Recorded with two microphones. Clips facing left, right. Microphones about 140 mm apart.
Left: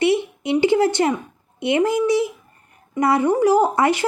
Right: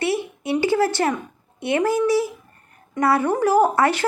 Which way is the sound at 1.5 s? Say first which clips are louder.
Left 2 dB; 15° left (ahead or behind).